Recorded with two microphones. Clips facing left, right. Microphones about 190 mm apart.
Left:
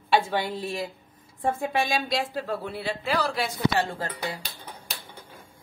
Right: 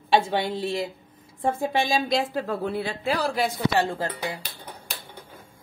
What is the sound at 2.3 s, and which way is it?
Speech, 45° right (ahead or behind).